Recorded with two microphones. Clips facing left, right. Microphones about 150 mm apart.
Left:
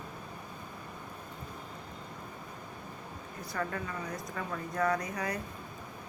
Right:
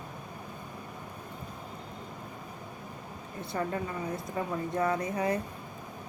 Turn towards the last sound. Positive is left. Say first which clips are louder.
# right 3 dB
turn(degrees=-25)  # may be behind; listen again after turning